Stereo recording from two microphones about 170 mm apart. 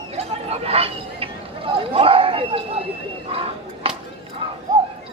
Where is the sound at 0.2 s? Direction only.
35° right (ahead or behind).